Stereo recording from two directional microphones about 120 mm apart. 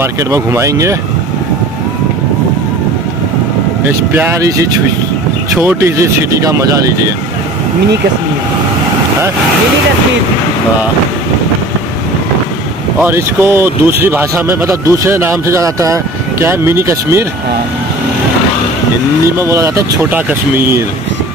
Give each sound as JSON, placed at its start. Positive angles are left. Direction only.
{"t": 0.0, "sound": "speech", "side_deg": -25}
{"t": 4.1, "sound": "speech", "side_deg": -15}
{"t": 4.4, "sound": "speech", "side_deg": -30}
{"t": 13.0, "sound": "speech", "side_deg": -20}
{"t": 19.3, "sound": "speech", "side_deg": -25}